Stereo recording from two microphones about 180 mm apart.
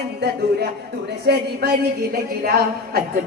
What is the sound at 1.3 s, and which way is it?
Speech, 65° right (ahead or behind).